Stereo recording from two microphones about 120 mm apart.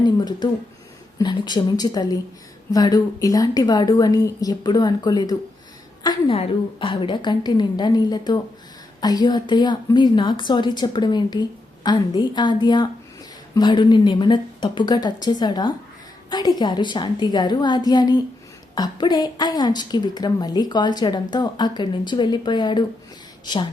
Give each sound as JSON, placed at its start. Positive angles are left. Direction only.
{"t": 0.0, "sound": "a sound", "side_deg": 35}
{"t": 1.2, "sound": "a woman's voice", "side_deg": 40}
{"t": 6.3, "sound": "a woman's voice", "side_deg": 50}